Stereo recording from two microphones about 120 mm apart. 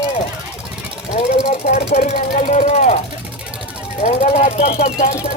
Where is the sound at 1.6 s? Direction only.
65° left (ahead or behind); by 3.0 s 90° left.